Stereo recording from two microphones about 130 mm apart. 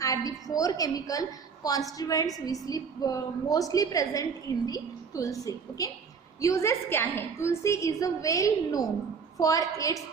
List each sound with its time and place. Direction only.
0.0 s a woman's voice: 25° left (ahead or behind)